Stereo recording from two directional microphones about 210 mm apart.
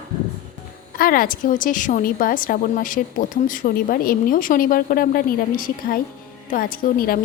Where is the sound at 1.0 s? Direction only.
40° left (ahead or behind).